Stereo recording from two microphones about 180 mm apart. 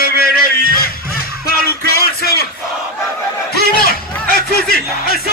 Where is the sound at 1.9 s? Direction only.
60° left (ahead or behind).